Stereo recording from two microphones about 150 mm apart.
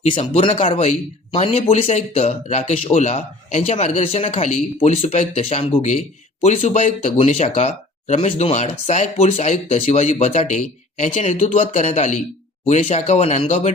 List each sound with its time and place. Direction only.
0.0 s speech: 40° left (ahead or behind)